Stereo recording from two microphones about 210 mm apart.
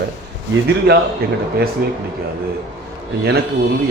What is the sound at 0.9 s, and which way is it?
Speech, 50° right (ahead or behind).